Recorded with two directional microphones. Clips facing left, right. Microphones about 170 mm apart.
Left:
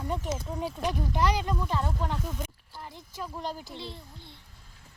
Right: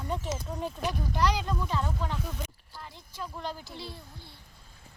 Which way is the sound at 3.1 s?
45° left (ahead or behind).